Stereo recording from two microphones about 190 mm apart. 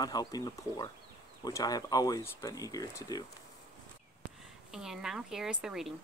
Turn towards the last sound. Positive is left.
turn(degrees=0)  # may be behind; listen again after turning